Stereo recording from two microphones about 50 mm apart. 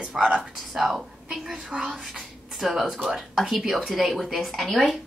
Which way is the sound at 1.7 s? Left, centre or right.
Right.